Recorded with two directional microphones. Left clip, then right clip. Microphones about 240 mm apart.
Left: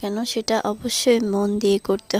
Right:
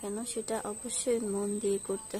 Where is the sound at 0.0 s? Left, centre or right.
Left.